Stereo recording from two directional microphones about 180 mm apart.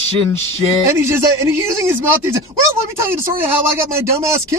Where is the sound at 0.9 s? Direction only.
15° right (ahead or behind).